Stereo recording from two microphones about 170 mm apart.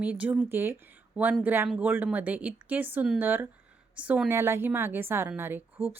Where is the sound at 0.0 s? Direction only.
10° right (ahead or behind).